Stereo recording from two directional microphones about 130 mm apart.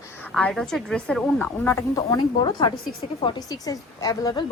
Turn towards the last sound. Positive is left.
turn(degrees=30)  # may be behind; listen again after turning